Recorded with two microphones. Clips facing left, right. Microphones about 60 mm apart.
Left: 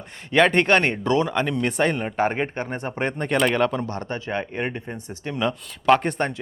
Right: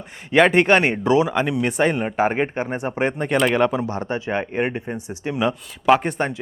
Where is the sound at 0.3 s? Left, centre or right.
Centre.